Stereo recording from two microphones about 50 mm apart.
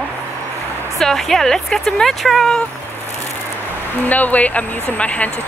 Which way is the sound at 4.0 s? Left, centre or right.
Left.